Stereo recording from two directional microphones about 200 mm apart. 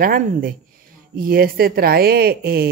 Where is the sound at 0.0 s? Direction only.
45° right (ahead or behind).